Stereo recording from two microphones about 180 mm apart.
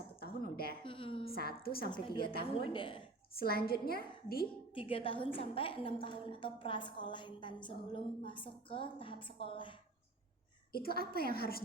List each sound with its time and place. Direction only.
0.2 s a sound: 60° left (ahead or behind)
0.9 s a sound: 30° left (ahead or behind)
1.4 s a woman's voice: 55° left (ahead or behind)
2.4 s a woman's voice: 30° left (ahead or behind)
3.3 s a woman's voice: 60° left (ahead or behind)
4.7 s a woman's voice: 30° left (ahead or behind)
10.7 s a woman's voice: 55° left (ahead or behind)